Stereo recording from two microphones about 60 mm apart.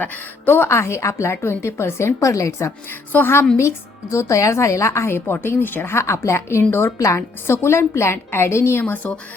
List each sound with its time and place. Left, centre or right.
0.0 s speech: left
3.1 s a woman's voice: left
3.6 s speech: left
9.0 s a woman's voice: left